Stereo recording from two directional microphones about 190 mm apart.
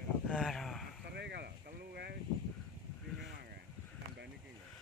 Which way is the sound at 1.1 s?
60° right (ahead or behind).